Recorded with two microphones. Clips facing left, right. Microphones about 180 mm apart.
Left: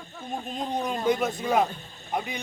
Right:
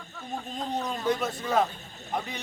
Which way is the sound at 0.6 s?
15° left (ahead or behind).